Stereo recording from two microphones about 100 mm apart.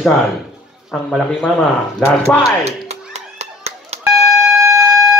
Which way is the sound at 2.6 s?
90° right.